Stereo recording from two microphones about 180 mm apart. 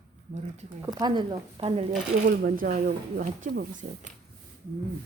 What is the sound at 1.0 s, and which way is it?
Speech, 25° right (ahead or behind).